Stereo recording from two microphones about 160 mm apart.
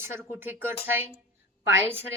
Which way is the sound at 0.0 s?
15° right (ahead or behind).